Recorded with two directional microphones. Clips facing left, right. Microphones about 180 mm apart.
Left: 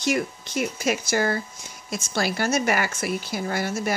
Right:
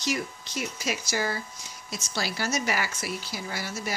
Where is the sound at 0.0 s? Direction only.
55° left (ahead or behind).